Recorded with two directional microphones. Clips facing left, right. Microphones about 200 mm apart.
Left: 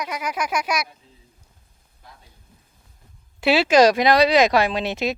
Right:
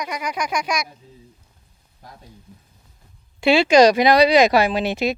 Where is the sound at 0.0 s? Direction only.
5° left (ahead or behind).